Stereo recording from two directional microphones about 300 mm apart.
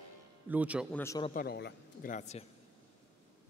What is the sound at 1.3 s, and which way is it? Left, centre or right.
A man's voice, left.